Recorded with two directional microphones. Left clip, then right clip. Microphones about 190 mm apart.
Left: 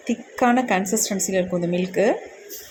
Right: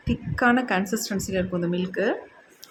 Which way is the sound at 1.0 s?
30° right (ahead or behind).